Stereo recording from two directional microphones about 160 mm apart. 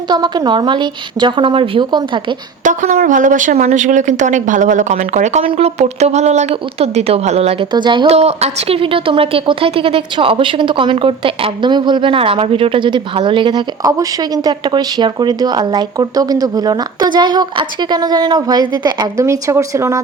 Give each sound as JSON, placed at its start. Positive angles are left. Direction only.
{"t": 0.1, "sound": "a woman's voice", "side_deg": -25}
{"t": 2.6, "sound": "a woman's voice", "side_deg": -55}
{"t": 8.0, "sound": "a woman's voice", "side_deg": -40}